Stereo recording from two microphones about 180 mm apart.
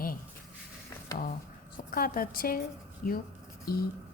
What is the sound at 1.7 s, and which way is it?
Speech, 55° left (ahead or behind).